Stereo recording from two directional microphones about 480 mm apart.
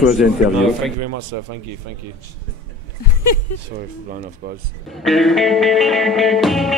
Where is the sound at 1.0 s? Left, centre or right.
Right.